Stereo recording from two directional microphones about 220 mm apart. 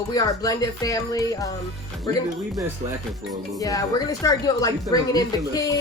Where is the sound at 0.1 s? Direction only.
15° left (ahead or behind).